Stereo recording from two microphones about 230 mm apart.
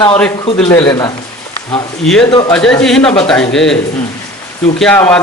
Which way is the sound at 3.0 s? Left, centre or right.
Left.